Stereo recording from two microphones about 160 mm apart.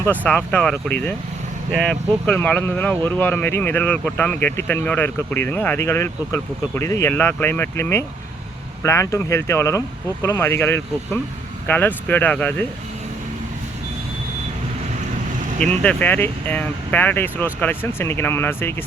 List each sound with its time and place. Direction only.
0.2 s speech: 10° left (ahead or behind)
15.8 s speech: 10° left (ahead or behind)